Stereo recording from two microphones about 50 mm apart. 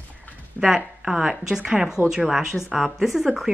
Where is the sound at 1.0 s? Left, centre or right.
Centre.